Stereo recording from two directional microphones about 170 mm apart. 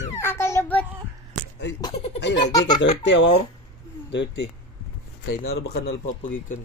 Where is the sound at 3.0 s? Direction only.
90° left.